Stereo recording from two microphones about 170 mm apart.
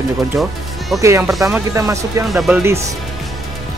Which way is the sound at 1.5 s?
20° right (ahead or behind).